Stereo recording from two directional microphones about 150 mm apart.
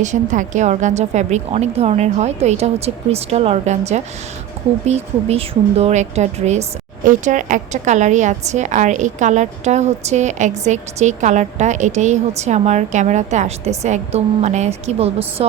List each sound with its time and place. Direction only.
0.0 s a woman's voice: 55° right (ahead or behind)